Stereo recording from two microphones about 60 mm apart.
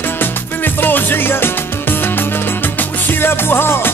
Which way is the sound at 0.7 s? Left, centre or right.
Left.